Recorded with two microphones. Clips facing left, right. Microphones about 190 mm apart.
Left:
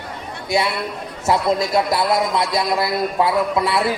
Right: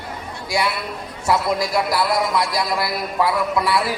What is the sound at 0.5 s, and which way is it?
A man's voice, 25° left (ahead or behind).